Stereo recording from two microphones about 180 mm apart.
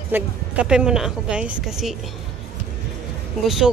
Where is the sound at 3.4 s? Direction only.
Centre (ahead or behind).